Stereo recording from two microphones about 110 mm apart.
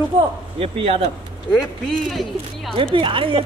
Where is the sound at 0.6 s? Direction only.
60° right (ahead or behind).